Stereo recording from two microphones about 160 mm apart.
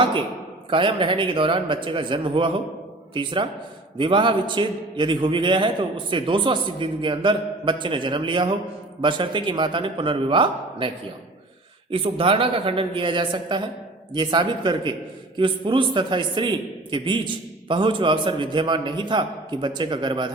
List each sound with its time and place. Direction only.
0.0 s a man's voice: 30° right (ahead or behind)